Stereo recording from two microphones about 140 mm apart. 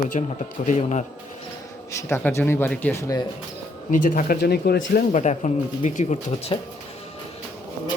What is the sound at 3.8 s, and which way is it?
Speech, 75° left (ahead or behind).